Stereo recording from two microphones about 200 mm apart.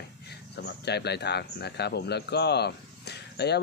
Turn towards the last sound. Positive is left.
turn(degrees=55)  # may be behind; listen again after turning